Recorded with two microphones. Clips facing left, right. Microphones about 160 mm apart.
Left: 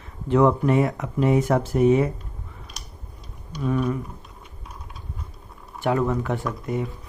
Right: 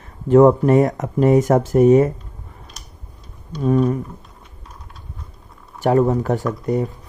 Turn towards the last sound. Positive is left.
turn(degrees=-40)  # may be behind; listen again after turning